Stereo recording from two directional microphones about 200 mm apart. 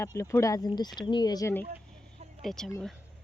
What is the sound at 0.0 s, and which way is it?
Speech, 15° left (ahead or behind).